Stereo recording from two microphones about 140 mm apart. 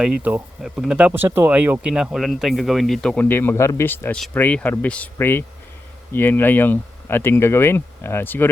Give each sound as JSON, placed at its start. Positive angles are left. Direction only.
{"t": 0.0, "sound": "speech", "side_deg": -10}